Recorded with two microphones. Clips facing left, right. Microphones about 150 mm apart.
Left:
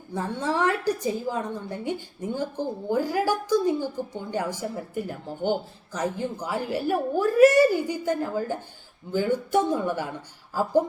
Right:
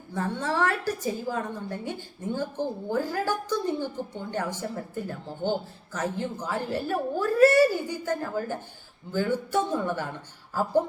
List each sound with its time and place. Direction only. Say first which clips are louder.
0.1 s a woman's voice: left 1 dB; 15° left (ahead or behind)